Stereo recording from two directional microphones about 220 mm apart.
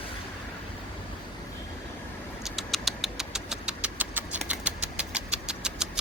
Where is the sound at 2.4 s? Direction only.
Centre (ahead or behind).